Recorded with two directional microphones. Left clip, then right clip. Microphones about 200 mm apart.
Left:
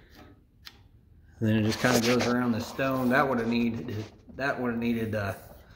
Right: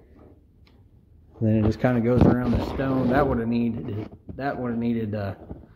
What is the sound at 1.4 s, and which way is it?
Speech, 25° right (ahead or behind).